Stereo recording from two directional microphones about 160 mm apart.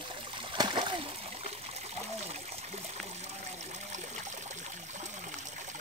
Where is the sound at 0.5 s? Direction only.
25° right (ahead or behind).